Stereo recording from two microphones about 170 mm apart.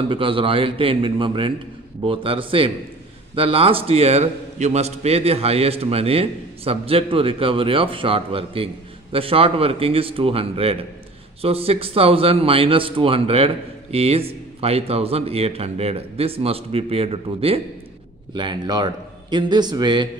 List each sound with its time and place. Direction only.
0.1 s a man's voice: 30° right (ahead or behind)